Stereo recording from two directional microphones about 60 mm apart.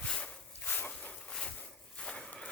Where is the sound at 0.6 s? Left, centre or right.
Left.